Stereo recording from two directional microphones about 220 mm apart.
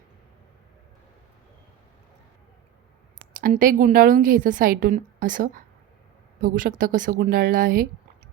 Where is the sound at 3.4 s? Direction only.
40° right (ahead or behind).